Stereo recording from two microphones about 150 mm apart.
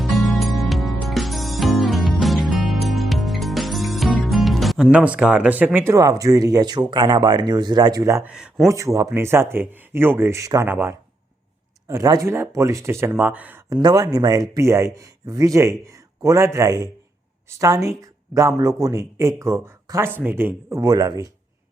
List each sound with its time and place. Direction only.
0.0 s music: centre (ahead or behind); by 8.3 s 20° right (ahead or behind)
8.3 s speech: 5° right (ahead or behind)
8.6 s speech: 20° right (ahead or behind)